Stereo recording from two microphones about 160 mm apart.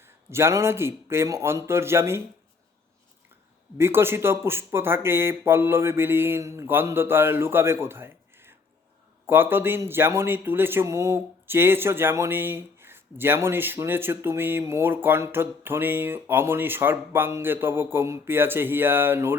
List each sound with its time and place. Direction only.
0.0 s speech: 15° right (ahead or behind)
3.8 s speech: 15° right (ahead or behind)